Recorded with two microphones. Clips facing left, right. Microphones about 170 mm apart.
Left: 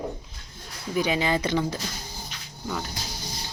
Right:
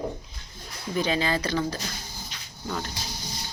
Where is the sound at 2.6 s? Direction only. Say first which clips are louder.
Even; centre (ahead or behind).